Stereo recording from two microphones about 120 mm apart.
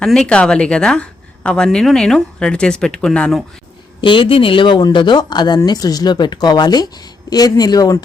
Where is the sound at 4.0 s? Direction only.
45° left (ahead or behind).